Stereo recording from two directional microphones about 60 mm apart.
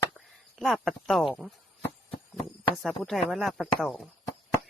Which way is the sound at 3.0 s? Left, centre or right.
Centre.